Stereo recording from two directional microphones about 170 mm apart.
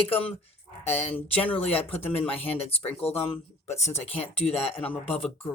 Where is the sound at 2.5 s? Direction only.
35° left (ahead or behind).